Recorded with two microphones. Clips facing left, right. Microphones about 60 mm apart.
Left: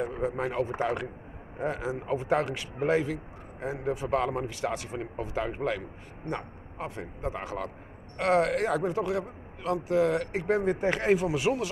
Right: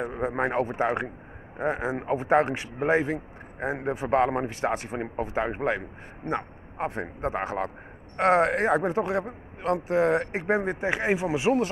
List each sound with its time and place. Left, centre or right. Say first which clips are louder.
0.0 s a man's voice: right 3 dB; right